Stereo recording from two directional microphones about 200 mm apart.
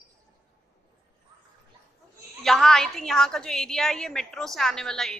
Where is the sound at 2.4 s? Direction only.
Centre (ahead or behind).